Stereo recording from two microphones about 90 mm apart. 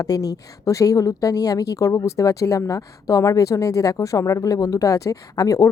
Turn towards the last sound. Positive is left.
turn(degrees=40)  # may be behind; listen again after turning